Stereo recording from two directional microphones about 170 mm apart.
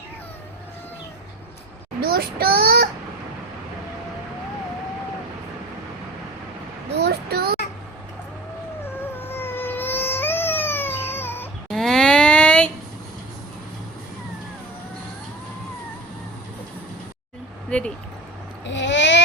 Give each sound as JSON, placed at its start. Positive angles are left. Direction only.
{"t": 2.0, "sound": "a child's voice", "side_deg": -60}
{"t": 6.9, "sound": "child singing", "side_deg": -75}
{"t": 9.0, "sound": "baby cry", "side_deg": 15}
{"t": 11.7, "sound": "a sound", "side_deg": 0}
{"t": 17.7, "sound": "vehicle", "side_deg": 5}
{"t": 18.7, "sound": "a sound", "side_deg": 90}